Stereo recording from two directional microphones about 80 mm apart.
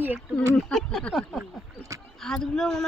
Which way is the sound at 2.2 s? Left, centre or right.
Centre.